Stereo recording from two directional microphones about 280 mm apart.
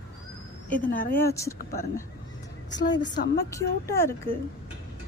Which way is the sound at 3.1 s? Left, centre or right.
Left.